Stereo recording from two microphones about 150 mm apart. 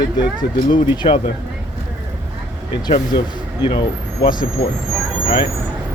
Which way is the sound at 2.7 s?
35° left (ahead or behind).